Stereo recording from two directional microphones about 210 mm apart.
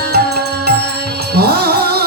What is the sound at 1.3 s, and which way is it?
Music, 50° right (ahead or behind).